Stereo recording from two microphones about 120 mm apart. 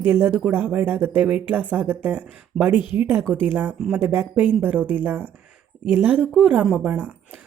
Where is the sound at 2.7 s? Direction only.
40° left (ahead or behind).